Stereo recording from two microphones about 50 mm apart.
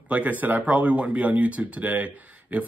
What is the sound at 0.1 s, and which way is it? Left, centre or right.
Speech, right.